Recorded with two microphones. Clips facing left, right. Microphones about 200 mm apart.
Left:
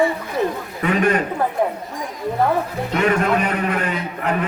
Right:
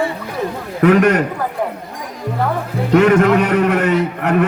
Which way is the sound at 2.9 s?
75° right (ahead or behind).